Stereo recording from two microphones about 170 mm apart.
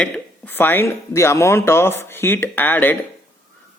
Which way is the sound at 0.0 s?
10° left (ahead or behind).